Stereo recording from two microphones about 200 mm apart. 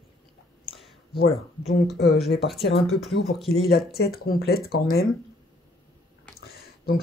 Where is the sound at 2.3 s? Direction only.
Centre (ahead or behind).